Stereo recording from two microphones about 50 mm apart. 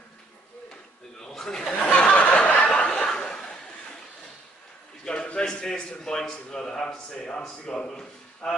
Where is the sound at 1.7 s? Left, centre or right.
Left.